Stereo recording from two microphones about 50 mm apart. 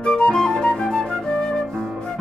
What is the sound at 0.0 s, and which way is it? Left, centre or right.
Flute, centre.